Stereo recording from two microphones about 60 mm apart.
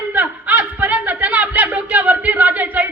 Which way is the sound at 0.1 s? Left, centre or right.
Right.